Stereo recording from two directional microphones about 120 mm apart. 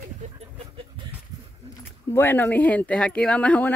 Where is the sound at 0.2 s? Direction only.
70° right (ahead or behind).